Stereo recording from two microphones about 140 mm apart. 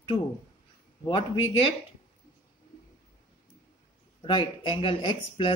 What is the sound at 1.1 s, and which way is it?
Speech, 35° left (ahead or behind).